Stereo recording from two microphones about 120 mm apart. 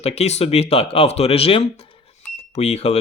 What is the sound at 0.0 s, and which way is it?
Speech, 60° left (ahead or behind).